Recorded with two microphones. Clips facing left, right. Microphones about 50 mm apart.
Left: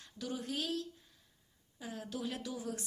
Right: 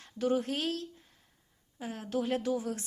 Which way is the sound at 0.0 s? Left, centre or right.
Right.